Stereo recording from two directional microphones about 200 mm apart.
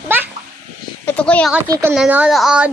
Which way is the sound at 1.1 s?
5° left (ahead or behind).